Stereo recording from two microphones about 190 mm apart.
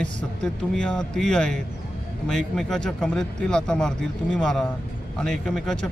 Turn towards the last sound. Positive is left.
turn(degrees=5)  # may be behind; listen again after turning